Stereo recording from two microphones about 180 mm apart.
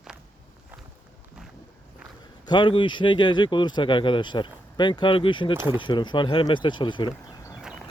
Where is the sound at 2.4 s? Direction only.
25° left (ahead or behind).